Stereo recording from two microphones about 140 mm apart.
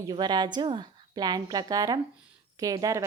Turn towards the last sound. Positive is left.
turn(degrees=-25)  # may be behind; listen again after turning